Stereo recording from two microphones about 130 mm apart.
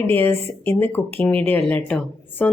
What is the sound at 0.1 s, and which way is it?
Speech, 15° left (ahead or behind).